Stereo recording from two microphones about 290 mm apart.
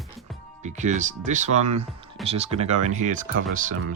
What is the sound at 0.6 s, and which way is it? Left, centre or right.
Speech, right.